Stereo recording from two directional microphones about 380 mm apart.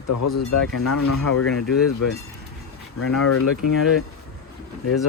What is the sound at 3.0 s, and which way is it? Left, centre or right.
Speech, left.